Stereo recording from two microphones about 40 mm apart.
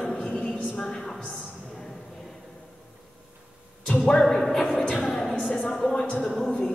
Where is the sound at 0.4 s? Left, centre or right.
Left.